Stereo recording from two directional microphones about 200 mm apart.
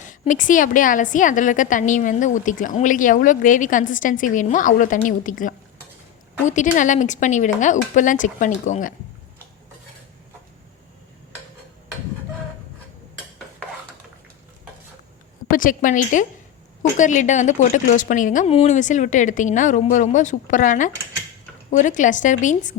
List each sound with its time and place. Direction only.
0.0 s a woman's voice: 40° left (ahead or behind)
15.4 s a woman's voice: 45° left (ahead or behind)